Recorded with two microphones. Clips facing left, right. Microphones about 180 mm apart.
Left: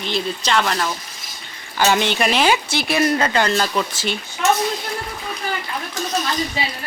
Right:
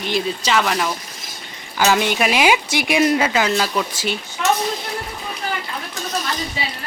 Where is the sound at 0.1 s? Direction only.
5° right (ahead or behind).